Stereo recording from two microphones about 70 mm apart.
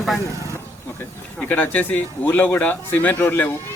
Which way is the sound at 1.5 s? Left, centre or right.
Left.